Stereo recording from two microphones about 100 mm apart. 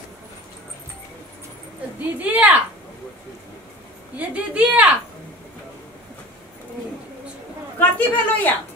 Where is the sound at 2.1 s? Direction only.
15° right (ahead or behind).